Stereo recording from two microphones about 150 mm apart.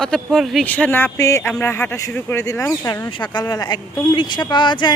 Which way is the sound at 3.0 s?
30° left (ahead or behind).